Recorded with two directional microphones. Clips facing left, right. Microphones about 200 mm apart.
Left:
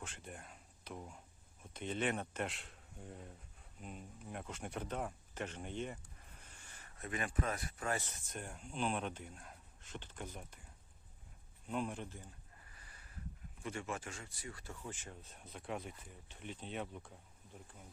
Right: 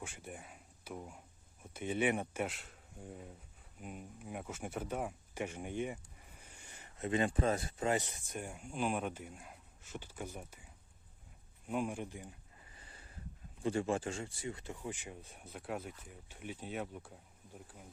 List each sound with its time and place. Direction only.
0.0 s speech: 10° right (ahead or behind)
11.7 s speech: 10° right (ahead or behind)
12.7 s a sound: 25° right (ahead or behind)
13.6 s speech: 30° right (ahead or behind); by 17.2 s 5° right (ahead or behind)